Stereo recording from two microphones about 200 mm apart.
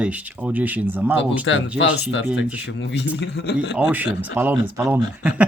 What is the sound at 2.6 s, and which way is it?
Speech, 60° left (ahead or behind).